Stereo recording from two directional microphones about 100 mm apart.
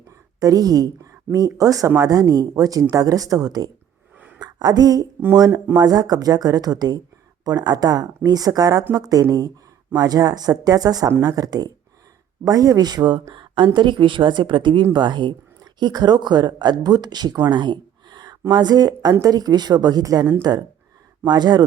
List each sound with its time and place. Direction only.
0.3 s a woman's voice: 40° right (ahead or behind)
13.3 s a sound: 50° right (ahead or behind)
13.7 s speech: 50° right (ahead or behind)